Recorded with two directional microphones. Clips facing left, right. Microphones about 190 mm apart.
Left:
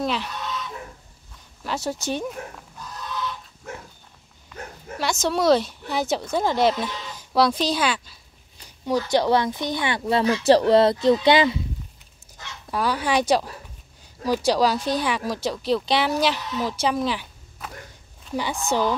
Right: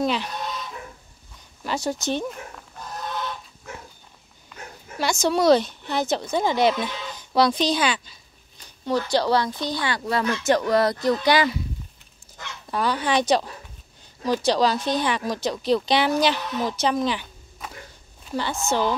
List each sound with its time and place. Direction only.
0.0 s chicken: centre (ahead or behind)
1.6 s speech: centre (ahead or behind)
2.8 s fowl: 55° right (ahead or behind)
4.9 s speech: centre (ahead or behind)
8.8 s speech: 15° left (ahead or behind)
12.7 s speech: 5° left (ahead or behind)